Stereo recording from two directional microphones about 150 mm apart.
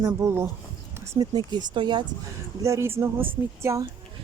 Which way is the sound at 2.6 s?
20° right (ahead or behind).